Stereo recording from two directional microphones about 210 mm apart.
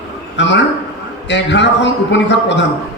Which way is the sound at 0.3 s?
55° left (ahead or behind).